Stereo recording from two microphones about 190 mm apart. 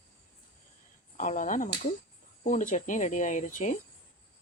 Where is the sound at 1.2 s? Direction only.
40° left (ahead or behind).